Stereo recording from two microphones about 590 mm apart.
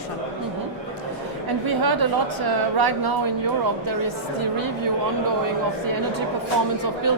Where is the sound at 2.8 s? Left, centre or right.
Right.